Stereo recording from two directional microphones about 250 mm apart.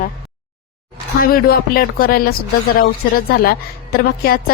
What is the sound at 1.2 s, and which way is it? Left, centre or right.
A woman's voice, left.